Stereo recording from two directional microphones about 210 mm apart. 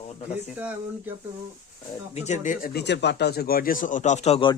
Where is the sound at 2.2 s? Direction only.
35° left (ahead or behind).